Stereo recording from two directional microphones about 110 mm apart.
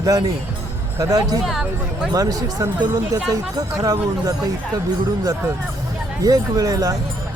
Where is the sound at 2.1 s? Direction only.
35° right (ahead or behind).